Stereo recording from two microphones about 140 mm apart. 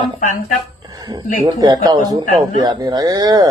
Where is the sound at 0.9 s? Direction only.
30° right (ahead or behind).